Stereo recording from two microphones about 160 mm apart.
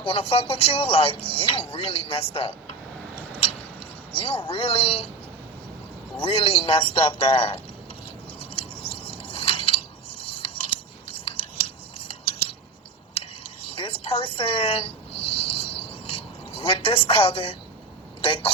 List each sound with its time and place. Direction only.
0.0 s speech: 35° left (ahead or behind)
4.1 s speech: 35° left (ahead or behind)
6.1 s speech: 35° left (ahead or behind)
8.4 s scissors: 35° left (ahead or behind)
11.9 s cutlery: 35° left (ahead or behind)
13.7 s a sound: 35° left (ahead or behind)
18.2 s speech: 35° left (ahead or behind)